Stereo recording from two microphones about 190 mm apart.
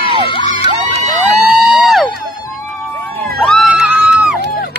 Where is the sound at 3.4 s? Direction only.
Centre (ahead or behind).